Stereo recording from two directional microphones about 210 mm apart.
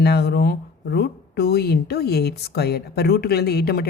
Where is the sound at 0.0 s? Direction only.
50° left (ahead or behind).